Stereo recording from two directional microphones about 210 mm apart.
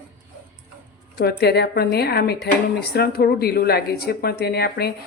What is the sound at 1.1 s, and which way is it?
Speech, 50° left (ahead or behind).